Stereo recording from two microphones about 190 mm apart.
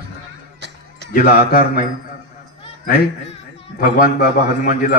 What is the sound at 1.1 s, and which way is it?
Speech, 45° left (ahead or behind).